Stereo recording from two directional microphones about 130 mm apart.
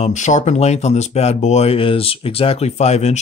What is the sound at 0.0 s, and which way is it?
Speech, 65° left (ahead or behind).